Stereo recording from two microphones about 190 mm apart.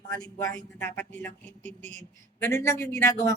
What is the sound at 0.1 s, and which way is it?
Speech, 20° left (ahead or behind).